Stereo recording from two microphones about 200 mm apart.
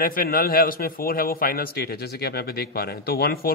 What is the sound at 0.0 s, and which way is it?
A man's voice, 45° left (ahead or behind).